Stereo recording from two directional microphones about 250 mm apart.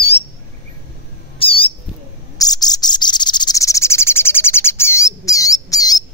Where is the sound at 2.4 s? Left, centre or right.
Centre.